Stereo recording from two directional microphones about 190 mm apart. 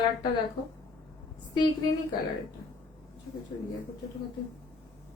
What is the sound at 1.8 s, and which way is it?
Speech, 20° left (ahead or behind).